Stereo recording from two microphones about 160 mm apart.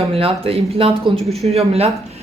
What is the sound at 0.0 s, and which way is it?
Speech, 35° right (ahead or behind).